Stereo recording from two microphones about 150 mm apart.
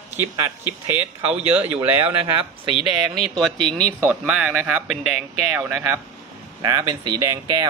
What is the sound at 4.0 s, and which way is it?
Speech, 10° right (ahead or behind).